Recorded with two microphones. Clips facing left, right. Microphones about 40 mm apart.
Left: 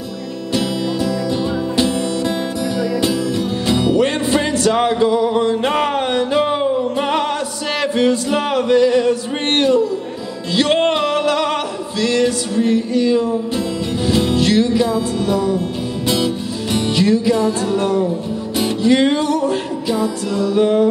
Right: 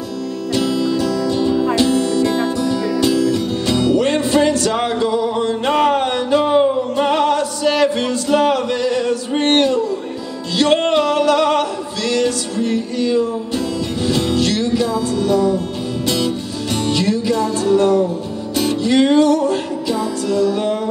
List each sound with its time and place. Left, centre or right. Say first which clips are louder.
0.5 s music: right 2 dB; left
10.5 s singing: right 1 dB; centre
16.1 s music: left 2 dB; centre